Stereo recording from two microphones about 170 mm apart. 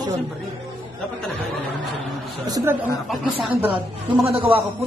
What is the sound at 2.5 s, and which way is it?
Speech, 20° right (ahead or behind).